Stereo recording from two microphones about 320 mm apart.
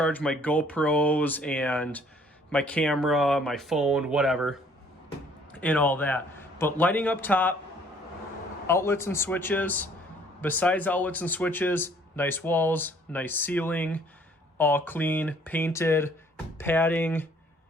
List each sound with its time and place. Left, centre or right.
0.0 s a man's voice: centre
8.6 s speech: centre